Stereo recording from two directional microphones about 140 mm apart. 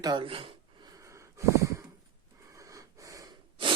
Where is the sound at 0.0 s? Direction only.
35° right (ahead or behind).